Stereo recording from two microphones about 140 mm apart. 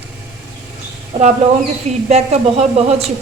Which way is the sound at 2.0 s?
50° right (ahead or behind).